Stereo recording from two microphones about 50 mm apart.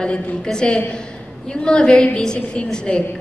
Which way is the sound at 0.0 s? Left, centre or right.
Centre.